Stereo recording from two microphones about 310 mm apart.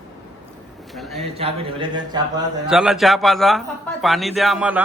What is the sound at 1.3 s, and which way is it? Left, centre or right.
Speech, centre.